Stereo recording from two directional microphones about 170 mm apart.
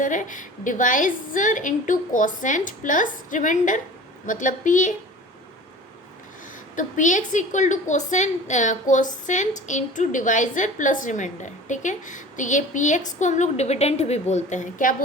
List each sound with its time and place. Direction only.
0.0 s a woman's voice: 50° left (ahead or behind)
6.7 s a woman's voice: 45° left (ahead or behind)